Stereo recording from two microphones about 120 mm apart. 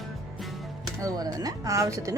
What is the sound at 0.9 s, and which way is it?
Speech, 30° right (ahead or behind).